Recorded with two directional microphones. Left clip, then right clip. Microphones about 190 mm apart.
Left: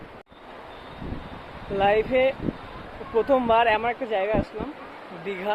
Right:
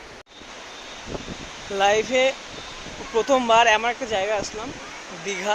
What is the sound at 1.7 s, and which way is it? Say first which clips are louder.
Speech: right 1 dB; 15° right (ahead or behind).